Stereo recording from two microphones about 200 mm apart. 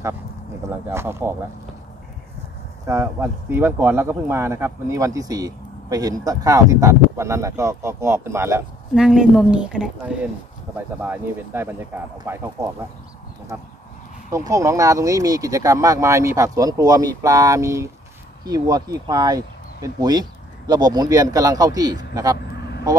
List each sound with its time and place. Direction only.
0.7 s speech: 10° right (ahead or behind)
2.9 s a woman's voice: 10° right (ahead or behind)
14.3 s speech: 15° right (ahead or behind)
22.6 s vehicle: 55° left (ahead or behind)